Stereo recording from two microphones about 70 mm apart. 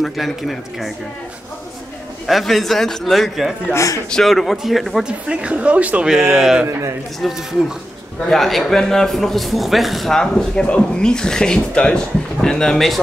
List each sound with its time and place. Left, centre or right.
0.0 s speech: centre
2.2 s speech: centre
3.7 s speech: left
4.1 s speech: centre
5.0 s speech: centre
6.0 s speech: centre
8.3 s speech: centre